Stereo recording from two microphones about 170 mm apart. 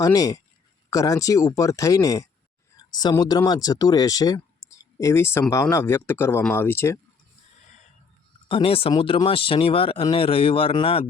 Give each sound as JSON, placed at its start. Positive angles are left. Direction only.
{"t": 0.0, "sound": "speech", "side_deg": 20}
{"t": 8.4, "sound": "speech", "side_deg": 35}